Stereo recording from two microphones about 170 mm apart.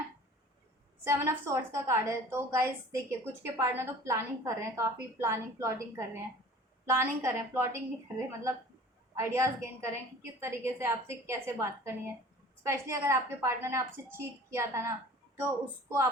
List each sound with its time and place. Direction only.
1.0 s a woman's voice: 15° right (ahead or behind)